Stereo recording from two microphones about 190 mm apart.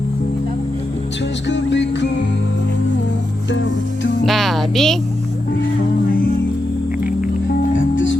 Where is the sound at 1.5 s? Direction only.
70° left (ahead or behind).